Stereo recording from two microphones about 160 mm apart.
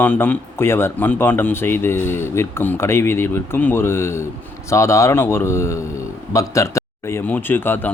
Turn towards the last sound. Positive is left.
turn(degrees=10)  # may be behind; listen again after turning